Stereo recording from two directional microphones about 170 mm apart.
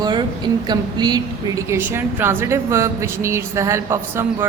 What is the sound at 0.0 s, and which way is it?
A woman's voice, 25° right (ahead or behind).